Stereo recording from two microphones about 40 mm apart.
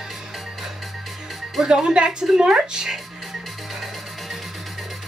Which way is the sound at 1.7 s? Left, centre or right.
Right.